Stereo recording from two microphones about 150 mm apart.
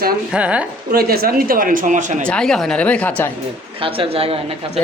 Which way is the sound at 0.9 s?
90° right.